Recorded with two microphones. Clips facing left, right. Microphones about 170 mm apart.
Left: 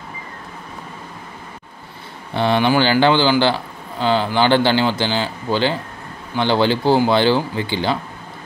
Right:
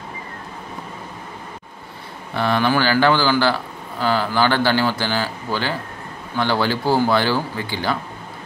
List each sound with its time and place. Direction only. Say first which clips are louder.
2.3 s speech: left 3 dB; 25° left (ahead or behind)